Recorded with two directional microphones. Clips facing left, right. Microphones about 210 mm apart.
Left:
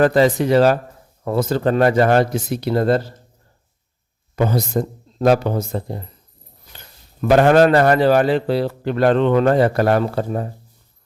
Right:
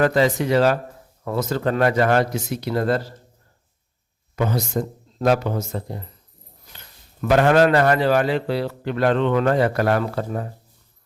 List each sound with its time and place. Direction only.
0.0 s a man's voice: 35° left (ahead or behind)
4.4 s a man's voice: 35° left (ahead or behind)
7.2 s a man's voice: 35° left (ahead or behind)